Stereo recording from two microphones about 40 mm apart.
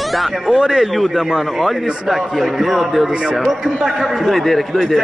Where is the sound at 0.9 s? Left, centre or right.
Centre.